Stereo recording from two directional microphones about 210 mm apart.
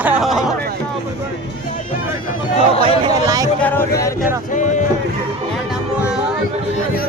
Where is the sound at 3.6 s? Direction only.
10° left (ahead or behind).